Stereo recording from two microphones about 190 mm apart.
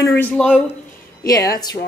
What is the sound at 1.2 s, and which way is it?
Speech, 20° left (ahead or behind).